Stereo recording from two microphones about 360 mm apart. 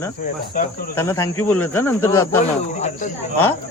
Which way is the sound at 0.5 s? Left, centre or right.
Left.